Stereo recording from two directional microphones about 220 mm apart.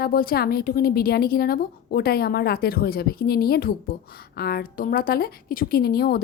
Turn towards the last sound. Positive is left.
turn(degrees=45)  # may be behind; listen again after turning